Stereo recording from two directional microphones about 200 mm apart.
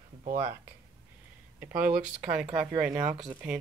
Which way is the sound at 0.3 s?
10° right (ahead or behind).